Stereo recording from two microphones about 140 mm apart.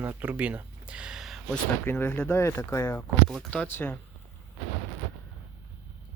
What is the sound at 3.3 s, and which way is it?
Speech, 5° left (ahead or behind).